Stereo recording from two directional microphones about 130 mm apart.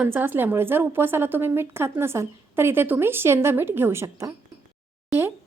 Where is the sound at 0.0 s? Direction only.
15° right (ahead or behind).